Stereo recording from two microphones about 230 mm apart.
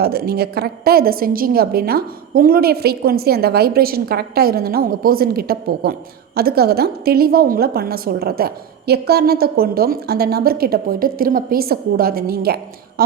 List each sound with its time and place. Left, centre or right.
0.0 s a woman's voice: right